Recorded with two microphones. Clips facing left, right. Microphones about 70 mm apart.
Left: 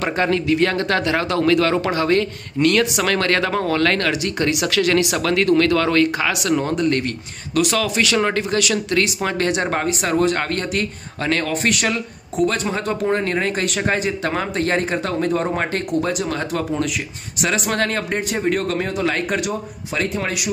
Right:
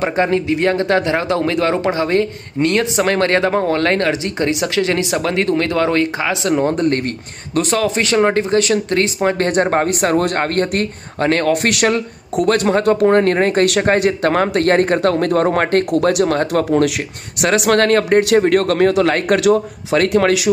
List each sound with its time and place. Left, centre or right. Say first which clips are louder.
0.0 s speech: right 3 dB; right
6.6 s speech: right 3 dB; right
9.8 s speech: right 3 dB; right
11.5 s speech: right 5 dB; right
15.9 s speech: right 7 dB; right
18.2 s a man's voice: right 8 dB; right